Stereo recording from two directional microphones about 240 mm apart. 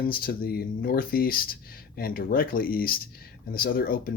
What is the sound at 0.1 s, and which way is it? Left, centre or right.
Speech, left.